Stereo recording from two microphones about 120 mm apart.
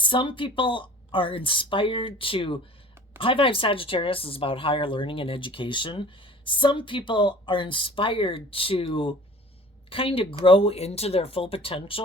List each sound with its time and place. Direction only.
0.0 s speech: 45° left (ahead or behind)